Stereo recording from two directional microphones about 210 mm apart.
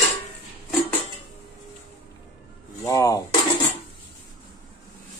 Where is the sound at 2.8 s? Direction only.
15° left (ahead or behind).